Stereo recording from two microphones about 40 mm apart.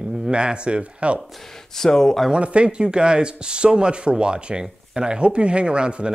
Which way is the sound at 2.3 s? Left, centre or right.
Right.